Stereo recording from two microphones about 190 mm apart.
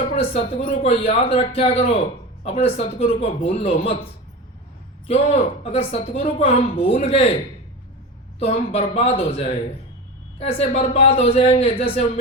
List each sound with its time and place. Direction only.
0.2 s a woman's voice: 30° left (ahead or behind)
5.0 s a woman's voice: 30° left (ahead or behind)
8.4 s a woman's voice: 30° left (ahead or behind)